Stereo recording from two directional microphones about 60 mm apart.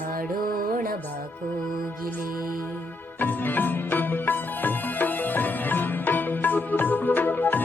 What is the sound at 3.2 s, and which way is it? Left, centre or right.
Music, left.